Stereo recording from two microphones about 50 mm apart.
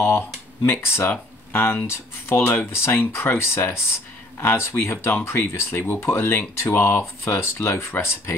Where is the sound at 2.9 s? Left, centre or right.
Left.